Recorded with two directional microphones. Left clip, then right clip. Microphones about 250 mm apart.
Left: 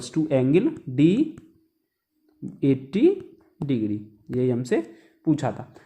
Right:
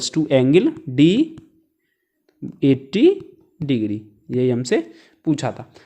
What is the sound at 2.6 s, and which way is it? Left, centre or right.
Speech, right.